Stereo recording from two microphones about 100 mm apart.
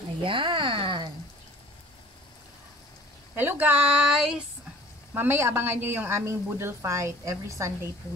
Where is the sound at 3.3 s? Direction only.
20° right (ahead or behind).